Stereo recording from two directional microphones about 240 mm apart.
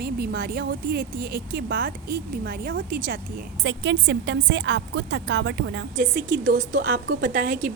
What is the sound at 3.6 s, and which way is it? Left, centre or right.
A woman's voice, right.